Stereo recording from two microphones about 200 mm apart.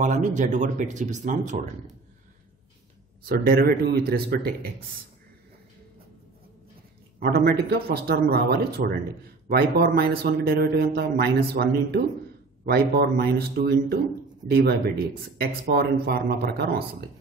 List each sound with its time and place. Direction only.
0.0 s speech: 40° right (ahead or behind)
3.3 s a man's voice: 50° right (ahead or behind)
7.2 s a man's voice: 50° right (ahead or behind)
13.2 s a man's voice: 55° right (ahead or behind)